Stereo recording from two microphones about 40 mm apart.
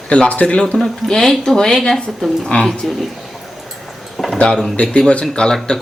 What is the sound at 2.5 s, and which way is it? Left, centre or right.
Speech, left.